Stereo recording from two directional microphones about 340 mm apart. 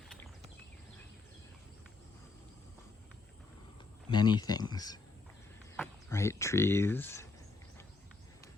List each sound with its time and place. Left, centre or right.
4.1 s speech: centre